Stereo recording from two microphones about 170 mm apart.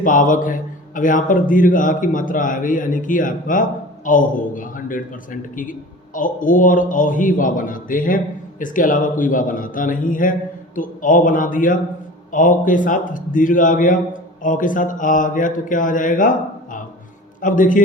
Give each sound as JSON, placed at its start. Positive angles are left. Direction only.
{"t": 0.0, "sound": "a man's voice", "side_deg": 50}